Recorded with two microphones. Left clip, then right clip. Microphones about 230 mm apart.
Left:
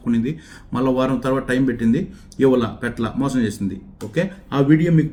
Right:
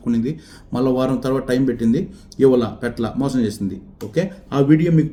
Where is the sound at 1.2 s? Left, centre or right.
Centre.